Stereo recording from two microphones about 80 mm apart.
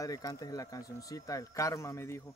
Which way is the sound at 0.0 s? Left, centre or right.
Left.